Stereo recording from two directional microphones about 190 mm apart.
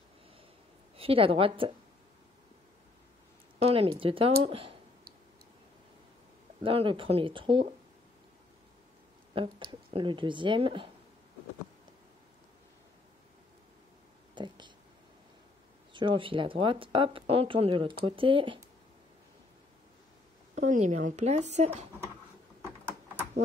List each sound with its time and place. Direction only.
0.9 s speech: 30° right (ahead or behind)
3.5 s speech: 30° right (ahead or behind)
6.6 s speech: 30° right (ahead or behind)
9.3 s speech: 25° right (ahead or behind)
14.3 s a sound: 25° right (ahead or behind)
15.9 s speech: 25° right (ahead or behind)
20.5 s speech: 40° right (ahead or behind)